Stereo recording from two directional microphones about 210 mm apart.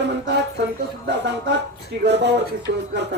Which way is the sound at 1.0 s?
55° right (ahead or behind).